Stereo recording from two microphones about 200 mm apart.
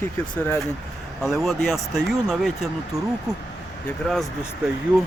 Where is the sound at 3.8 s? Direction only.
Centre (ahead or behind).